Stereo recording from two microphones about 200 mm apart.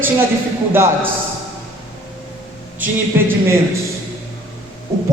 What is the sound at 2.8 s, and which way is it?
Speech, 10° right (ahead or behind).